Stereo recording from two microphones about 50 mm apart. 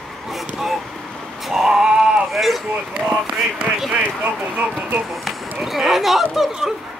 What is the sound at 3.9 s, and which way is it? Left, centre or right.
Speech, right.